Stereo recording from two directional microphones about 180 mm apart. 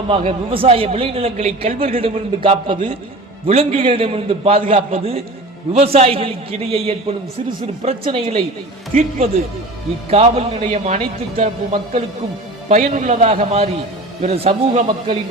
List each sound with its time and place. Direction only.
0.1 s a man's voice: 30° right (ahead or behind)